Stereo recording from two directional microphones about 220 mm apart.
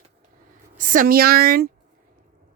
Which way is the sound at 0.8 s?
35° right (ahead or behind).